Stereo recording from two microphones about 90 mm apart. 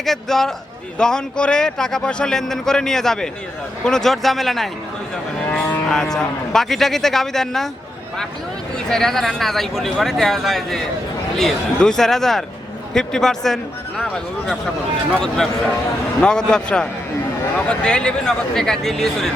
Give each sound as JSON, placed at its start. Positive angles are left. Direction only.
{"t": 0.0, "sound": "a man's voice", "side_deg": 5}
{"t": 8.9, "sound": "a man's voice", "side_deg": 5}